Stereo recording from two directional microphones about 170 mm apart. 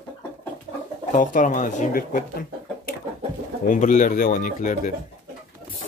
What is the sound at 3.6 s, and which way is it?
Speech, 50° left (ahead or behind).